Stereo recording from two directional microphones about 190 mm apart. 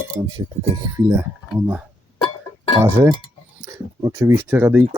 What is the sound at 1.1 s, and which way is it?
Speech, 10° right (ahead or behind).